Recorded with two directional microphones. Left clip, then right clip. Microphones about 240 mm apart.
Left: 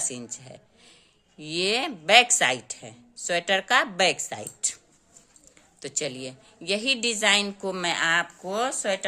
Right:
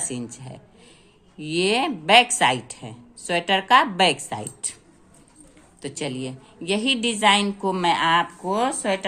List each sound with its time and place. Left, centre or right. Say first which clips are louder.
0.0 s a woman's voice: right 2 dB; centre
5.8 s a woman's voice: right 2 dB; left